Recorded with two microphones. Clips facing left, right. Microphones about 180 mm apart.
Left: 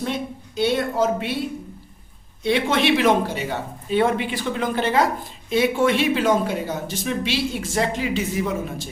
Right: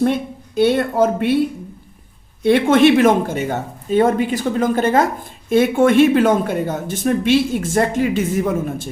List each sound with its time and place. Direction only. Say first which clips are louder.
0.0 s speech: right 8 dB; 55° right (ahead or behind)
2.4 s speech: right 8 dB; 50° right (ahead or behind)